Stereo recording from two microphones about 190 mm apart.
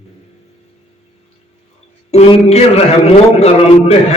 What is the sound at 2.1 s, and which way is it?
A man's voice, 35° left (ahead or behind).